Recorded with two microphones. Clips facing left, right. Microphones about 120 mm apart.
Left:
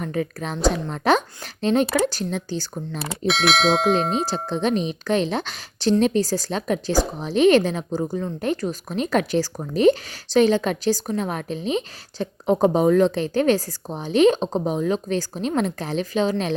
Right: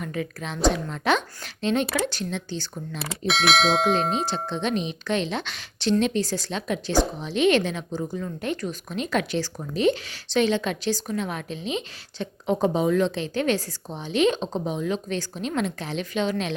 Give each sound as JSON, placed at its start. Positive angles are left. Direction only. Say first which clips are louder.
{"t": 0.0, "sound": "a woman's voice", "louder": "left 5 dB", "side_deg": 35}
{"t": 3.0, "sound": "bell", "louder": "left 3 dB", "side_deg": 0}
{"t": 4.4, "sound": "a woman's voice", "louder": "left 4 dB", "side_deg": 40}